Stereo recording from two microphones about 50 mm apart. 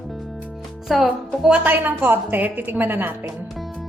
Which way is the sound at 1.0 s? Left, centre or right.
Centre.